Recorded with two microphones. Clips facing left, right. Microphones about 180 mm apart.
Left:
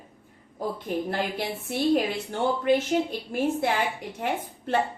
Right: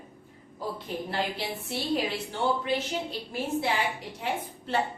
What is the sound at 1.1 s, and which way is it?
A woman's voice, 50° left (ahead or behind).